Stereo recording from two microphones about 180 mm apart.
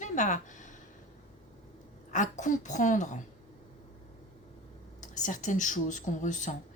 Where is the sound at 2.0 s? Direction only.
45° left (ahead or behind).